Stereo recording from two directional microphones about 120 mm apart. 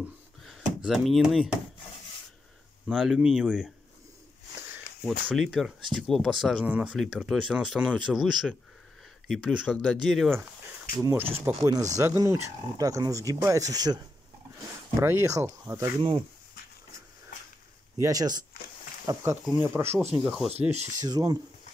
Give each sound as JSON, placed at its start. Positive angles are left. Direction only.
{"t": 0.5, "sound": "speech", "side_deg": 0}
{"t": 2.9, "sound": "speech", "side_deg": -5}
{"t": 5.0, "sound": "speech", "side_deg": 0}
{"t": 11.0, "sound": "speech", "side_deg": -25}
{"t": 15.0, "sound": "speech", "side_deg": -20}
{"t": 16.0, "sound": "speech", "side_deg": -50}
{"t": 17.9, "sound": "speech", "side_deg": -30}
{"t": 20.2, "sound": "speech", "side_deg": 0}
{"t": 20.7, "sound": "speech", "side_deg": -65}
{"t": 21.0, "sound": "speech", "side_deg": -30}